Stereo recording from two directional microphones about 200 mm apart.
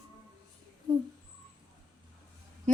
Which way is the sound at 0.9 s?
20° right (ahead or behind).